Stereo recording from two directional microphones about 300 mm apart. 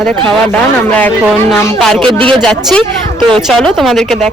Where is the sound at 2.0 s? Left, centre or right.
Centre.